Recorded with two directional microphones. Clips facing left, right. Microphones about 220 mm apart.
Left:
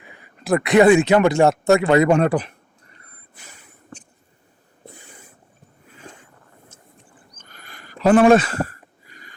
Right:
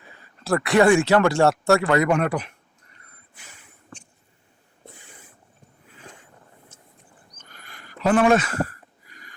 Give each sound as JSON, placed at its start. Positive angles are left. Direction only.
{"t": 0.0, "sound": "speech", "side_deg": 15}
{"t": 3.3, "sound": "snort", "side_deg": 40}
{"t": 7.3, "sound": "a sound", "side_deg": 35}